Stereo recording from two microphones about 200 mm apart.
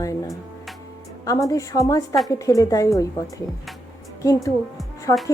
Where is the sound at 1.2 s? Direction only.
15° left (ahead or behind).